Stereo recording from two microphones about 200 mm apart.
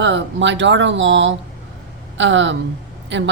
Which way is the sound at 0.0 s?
65° right (ahead or behind).